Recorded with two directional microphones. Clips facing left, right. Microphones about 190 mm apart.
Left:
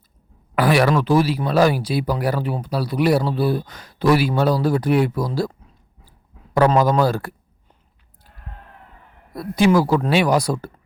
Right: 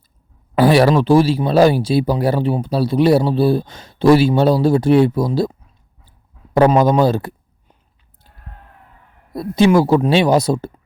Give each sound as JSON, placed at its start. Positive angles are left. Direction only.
{"t": 0.5, "sound": "speech", "side_deg": -30}
{"t": 6.7, "sound": "speech", "side_deg": -20}
{"t": 9.3, "sound": "speech", "side_deg": -25}